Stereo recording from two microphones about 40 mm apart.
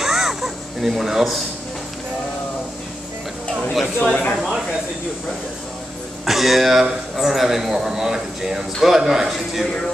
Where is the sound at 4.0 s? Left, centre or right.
Left.